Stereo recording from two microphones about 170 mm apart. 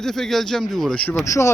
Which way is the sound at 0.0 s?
5° left (ahead or behind).